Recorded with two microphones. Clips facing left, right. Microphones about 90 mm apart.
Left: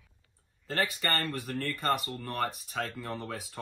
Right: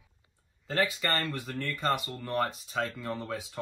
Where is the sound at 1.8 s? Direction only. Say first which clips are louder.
Right 1 dB; 20° right (ahead or behind).